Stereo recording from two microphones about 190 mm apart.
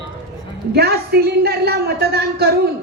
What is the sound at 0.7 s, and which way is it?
A woman's voice, 55° right (ahead or behind).